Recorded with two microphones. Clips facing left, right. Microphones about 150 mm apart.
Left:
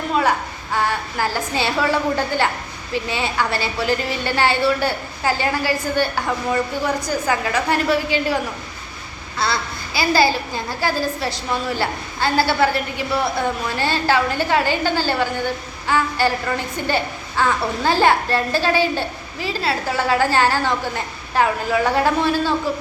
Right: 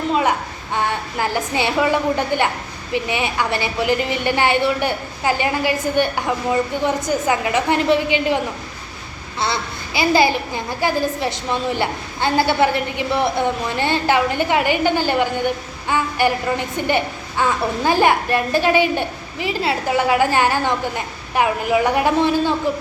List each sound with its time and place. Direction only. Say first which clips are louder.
0.1 s a child's voice: left 1 dB; 20° right (ahead or behind)
9.4 s a child's voice: even; 20° right (ahead or behind)